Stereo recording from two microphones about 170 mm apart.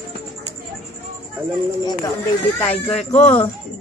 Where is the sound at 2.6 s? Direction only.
5° left (ahead or behind).